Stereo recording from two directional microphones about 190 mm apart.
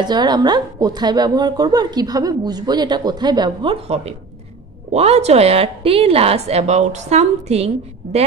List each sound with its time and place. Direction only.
0.0 s a woman's voice: 20° right (ahead or behind)